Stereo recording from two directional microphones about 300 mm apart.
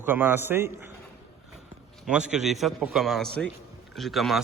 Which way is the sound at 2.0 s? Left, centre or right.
Centre.